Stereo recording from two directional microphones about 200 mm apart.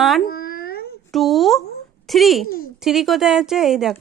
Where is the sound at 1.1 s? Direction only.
Centre (ahead or behind).